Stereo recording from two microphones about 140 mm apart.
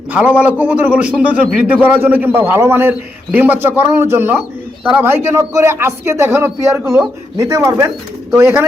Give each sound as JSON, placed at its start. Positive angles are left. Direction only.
{"t": 0.1, "sound": "a man's voice", "side_deg": -10}